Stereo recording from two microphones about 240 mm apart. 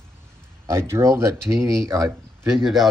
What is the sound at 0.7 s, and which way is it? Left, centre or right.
Speech, centre.